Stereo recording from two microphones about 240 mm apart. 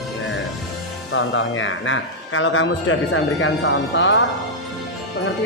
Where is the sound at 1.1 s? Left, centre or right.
Left.